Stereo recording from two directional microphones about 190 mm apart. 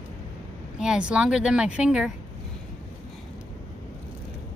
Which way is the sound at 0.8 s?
5° right (ahead or behind).